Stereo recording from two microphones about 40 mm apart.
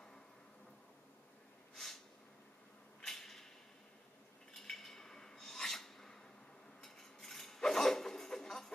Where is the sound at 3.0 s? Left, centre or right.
Centre.